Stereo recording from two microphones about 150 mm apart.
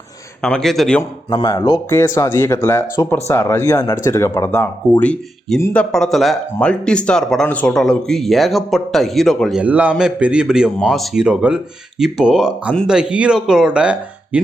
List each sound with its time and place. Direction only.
0.4 s speech: 5° left (ahead or behind)
1.3 s speech: 25° left (ahead or behind)
1.9 s speech: 15° left (ahead or behind); by 13.9 s 5° right (ahead or behind)